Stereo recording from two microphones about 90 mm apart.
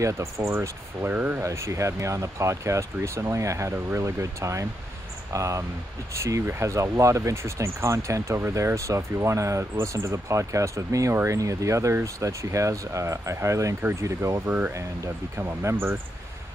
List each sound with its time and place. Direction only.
0.0 s speech: 35° right (ahead or behind)
1.4 s speech: 35° right (ahead or behind)
14.4 s speech: 20° right (ahead or behind)
15.3 s speech: 35° right (ahead or behind)
15.7 s speech: 20° right (ahead or behind)